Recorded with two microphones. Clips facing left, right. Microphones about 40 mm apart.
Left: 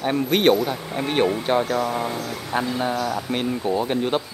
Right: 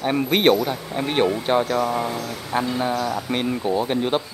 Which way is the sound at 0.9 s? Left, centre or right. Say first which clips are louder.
Even; centre.